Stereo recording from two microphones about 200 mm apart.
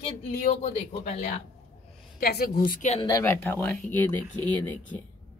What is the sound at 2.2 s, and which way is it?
Speech, 50° left (ahead or behind).